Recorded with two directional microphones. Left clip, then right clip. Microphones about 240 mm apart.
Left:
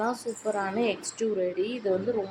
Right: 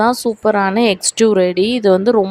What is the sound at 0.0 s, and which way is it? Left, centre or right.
A woman's voice, right.